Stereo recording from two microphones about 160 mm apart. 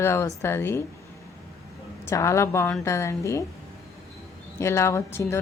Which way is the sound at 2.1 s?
20° left (ahead or behind).